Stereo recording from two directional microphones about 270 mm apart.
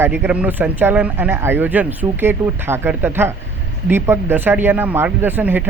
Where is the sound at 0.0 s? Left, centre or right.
Centre.